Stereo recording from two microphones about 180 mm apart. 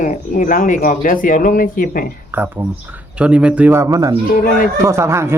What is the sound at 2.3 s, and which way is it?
Speech, 10° right (ahead or behind).